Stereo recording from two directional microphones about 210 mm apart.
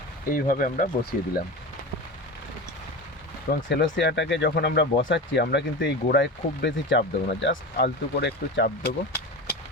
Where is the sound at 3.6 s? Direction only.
55° left (ahead or behind).